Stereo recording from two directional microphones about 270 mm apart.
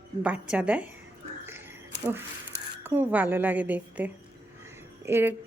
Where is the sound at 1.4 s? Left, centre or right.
Centre.